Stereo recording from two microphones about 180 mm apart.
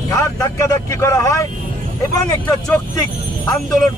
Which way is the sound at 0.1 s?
15° left (ahead or behind).